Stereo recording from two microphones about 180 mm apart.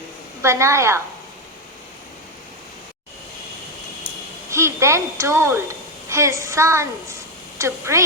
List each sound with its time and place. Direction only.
0.4 s a woman's voice: 15° right (ahead or behind)
4.0 s a woman's voice: 15° right (ahead or behind)